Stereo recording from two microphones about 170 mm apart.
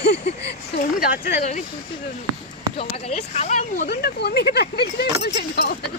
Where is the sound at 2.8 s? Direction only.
35° left (ahead or behind).